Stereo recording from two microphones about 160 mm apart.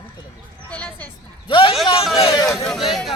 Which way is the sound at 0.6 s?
10° left (ahead or behind).